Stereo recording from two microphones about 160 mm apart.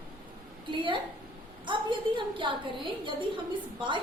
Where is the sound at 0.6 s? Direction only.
30° right (ahead or behind).